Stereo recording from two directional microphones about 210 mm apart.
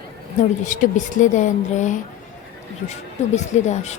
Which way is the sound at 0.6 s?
35° left (ahead or behind).